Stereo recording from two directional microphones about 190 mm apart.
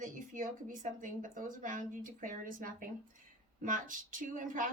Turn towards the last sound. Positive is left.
turn(degrees=-45)  # may be behind; listen again after turning